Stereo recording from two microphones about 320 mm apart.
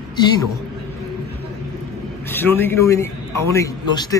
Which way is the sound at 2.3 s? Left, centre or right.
Centre.